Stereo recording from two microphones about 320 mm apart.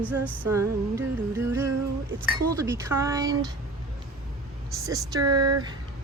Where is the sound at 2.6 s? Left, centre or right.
Centre.